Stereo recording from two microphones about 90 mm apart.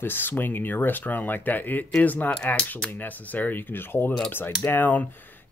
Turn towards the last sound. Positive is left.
turn(degrees=20)  # may be behind; listen again after turning